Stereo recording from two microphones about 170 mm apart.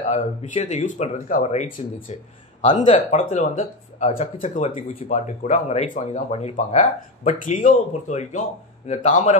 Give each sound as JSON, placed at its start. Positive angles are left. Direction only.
{"t": 0.0, "sound": "speech", "side_deg": 45}